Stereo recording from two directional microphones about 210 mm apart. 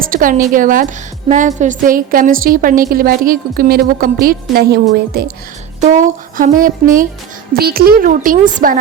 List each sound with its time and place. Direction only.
0.1 s a sound: 40° right (ahead or behind)
0.5 s a woman's voice: 40° right (ahead or behind)
5.8 s a woman's voice: 35° right (ahead or behind)